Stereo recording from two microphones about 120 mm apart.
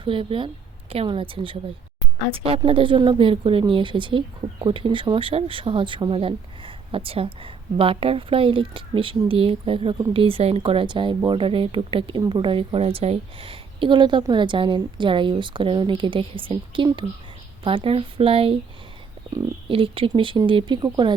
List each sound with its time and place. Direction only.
0.0 s speech: 45° right (ahead or behind)
19.6 s speech: 45° right (ahead or behind)